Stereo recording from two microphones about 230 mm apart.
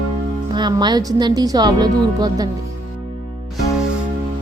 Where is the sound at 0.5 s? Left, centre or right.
Centre.